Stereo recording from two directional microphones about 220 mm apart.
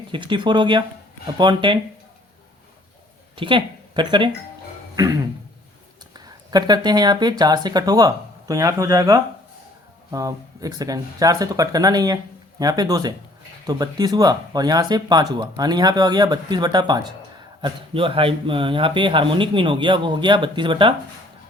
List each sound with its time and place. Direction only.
0.1 s a man's voice: 20° right (ahead or behind)
3.3 s speech: 20° right (ahead or behind)
6.1 s a man's voice: 20° right (ahead or behind)